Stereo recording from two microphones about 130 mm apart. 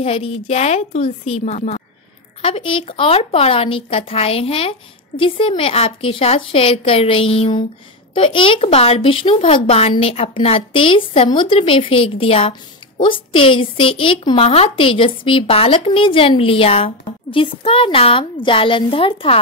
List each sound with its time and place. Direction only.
0.0 s a woman's voice: 50° left (ahead or behind)
2.4 s a woman's voice: 45° left (ahead or behind)